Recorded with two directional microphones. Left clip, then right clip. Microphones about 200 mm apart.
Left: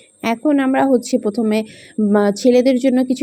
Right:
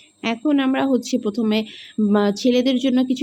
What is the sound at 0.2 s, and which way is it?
Speech, 20° left (ahead or behind).